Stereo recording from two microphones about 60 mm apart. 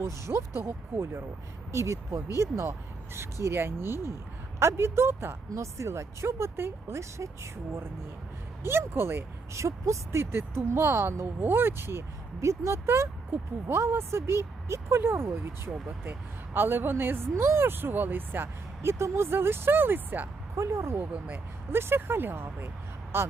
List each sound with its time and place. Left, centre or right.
0.0 s speech: right
5.5 s speech: right
9.5 s speech: right
20.6 s speech: right